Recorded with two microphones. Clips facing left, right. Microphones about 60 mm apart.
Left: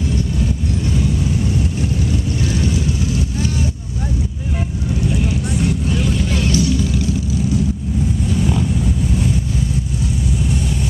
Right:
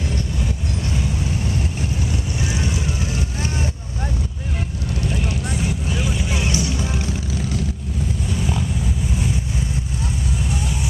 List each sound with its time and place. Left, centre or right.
2.4 s boat: right
5.1 s vehicle: centre; by 7.1 s right
8.4 s a sound: centre